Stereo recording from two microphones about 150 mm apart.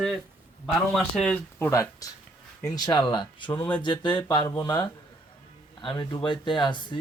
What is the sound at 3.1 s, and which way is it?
Speech, 30° left (ahead or behind).